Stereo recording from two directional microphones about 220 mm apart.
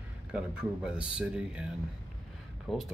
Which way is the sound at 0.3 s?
5° right (ahead or behind).